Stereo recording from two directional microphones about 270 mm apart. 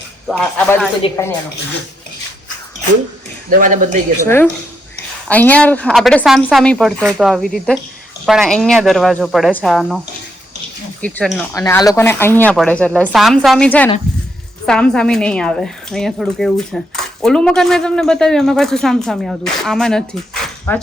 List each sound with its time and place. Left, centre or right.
0.3 s a woman's voice: centre
3.5 s speech: right
5.3 s speech: centre
11.0 s speech: centre